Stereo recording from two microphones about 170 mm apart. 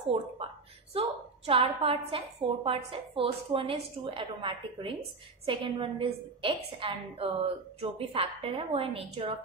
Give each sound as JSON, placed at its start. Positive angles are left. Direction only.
{"t": 0.9, "sound": "a woman's voice", "side_deg": -35}